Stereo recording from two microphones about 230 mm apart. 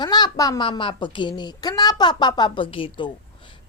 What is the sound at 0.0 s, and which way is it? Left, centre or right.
A woman's voice, centre.